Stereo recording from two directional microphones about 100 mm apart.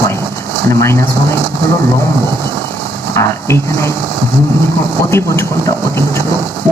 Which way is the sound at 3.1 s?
25° left (ahead or behind).